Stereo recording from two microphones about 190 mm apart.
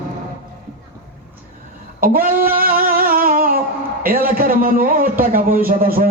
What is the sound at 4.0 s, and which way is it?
A man's voice, 50° right (ahead or behind).